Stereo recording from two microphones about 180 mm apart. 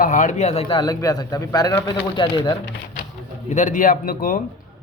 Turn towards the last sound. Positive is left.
turn(degrees=50)  # may be behind; listen again after turning